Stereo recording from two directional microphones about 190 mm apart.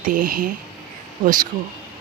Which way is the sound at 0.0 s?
45° right (ahead or behind).